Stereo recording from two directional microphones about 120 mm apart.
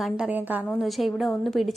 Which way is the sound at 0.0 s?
10° right (ahead or behind).